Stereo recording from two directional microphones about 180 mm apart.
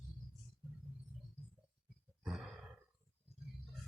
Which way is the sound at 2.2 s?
5° right (ahead or behind).